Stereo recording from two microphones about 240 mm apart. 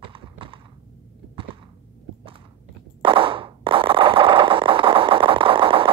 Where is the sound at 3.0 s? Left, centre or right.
Right.